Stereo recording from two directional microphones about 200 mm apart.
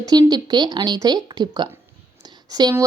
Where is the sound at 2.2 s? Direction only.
20° right (ahead or behind).